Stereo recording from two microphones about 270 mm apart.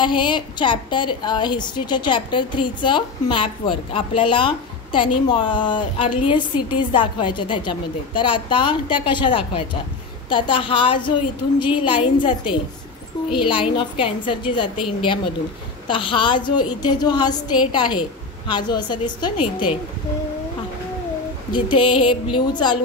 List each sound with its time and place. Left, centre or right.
0.0 s a woman's voice: centre
15.9 s a woman's voice: centre
21.5 s a woman's voice: centre